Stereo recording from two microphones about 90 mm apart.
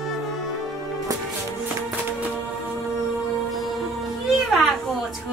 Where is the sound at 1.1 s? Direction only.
40° right (ahead or behind).